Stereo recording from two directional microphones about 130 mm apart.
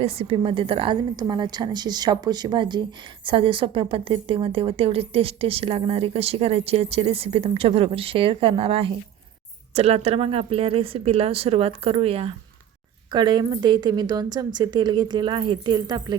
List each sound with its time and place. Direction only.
0.0 s a woman's voice: 50° right (ahead or behind)
13.1 s a woman's voice: 35° right (ahead or behind)